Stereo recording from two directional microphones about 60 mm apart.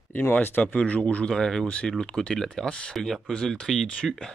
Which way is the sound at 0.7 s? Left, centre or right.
Left.